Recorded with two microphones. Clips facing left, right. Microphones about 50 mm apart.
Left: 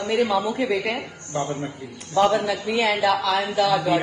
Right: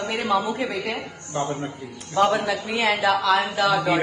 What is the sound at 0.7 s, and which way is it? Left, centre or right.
Speech, left.